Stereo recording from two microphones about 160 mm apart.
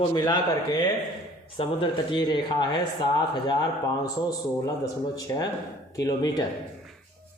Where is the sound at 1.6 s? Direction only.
30° left (ahead or behind).